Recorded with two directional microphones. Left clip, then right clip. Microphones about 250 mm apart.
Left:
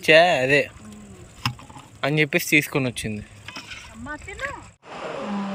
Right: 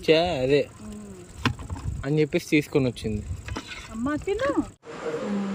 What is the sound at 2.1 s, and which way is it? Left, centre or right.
Speech, centre.